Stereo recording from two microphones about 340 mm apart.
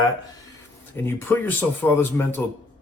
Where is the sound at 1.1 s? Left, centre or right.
Centre.